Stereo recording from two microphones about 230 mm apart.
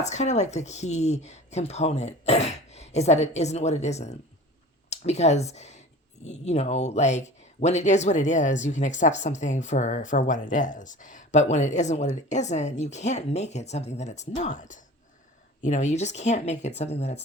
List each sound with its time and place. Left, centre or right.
0.0 s speech: left